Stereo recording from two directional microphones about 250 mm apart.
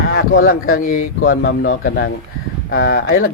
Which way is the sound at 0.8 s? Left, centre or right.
Left.